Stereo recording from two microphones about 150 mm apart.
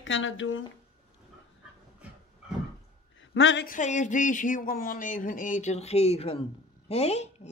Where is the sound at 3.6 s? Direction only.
55° left (ahead or behind).